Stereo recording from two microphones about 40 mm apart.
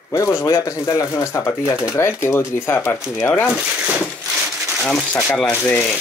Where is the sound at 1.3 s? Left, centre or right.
Left.